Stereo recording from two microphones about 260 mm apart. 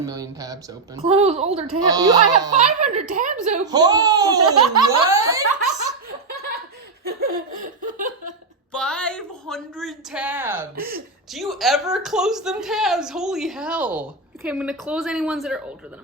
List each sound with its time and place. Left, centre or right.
0.0 s a woman's voice: centre
1.8 s speech: centre
2.5 s a woman's voice: right
3.7 s speech: centre
7.0 s laughter: right
7.9 s a sound: right
8.7 s a woman's voice: centre
10.8 s speech: right
11.3 s a woman's voice: centre